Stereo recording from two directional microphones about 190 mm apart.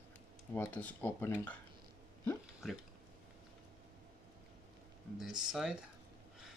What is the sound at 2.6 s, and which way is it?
Speech, centre (ahead or behind).